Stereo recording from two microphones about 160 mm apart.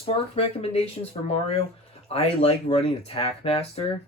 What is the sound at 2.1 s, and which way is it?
Speech, 40° left (ahead or behind).